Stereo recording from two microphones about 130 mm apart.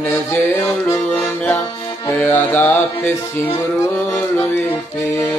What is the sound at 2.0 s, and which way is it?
Music, 15° left (ahead or behind).